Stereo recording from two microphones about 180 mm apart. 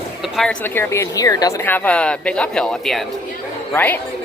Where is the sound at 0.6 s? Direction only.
10° left (ahead or behind).